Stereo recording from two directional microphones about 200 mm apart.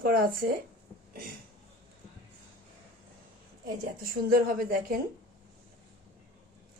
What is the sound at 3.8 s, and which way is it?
A woman's voice, 45° right (ahead or behind).